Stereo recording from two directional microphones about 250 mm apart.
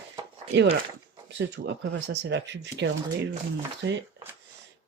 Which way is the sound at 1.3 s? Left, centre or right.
Right.